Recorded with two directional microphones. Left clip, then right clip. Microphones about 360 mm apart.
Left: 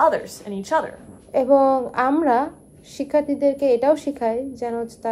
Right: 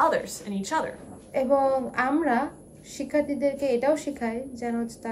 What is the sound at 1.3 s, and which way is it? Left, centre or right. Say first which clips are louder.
A woman's voice: left 6 dB; centre.